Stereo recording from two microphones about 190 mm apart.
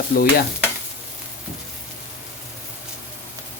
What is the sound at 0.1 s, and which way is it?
Speech, 55° left (ahead or behind).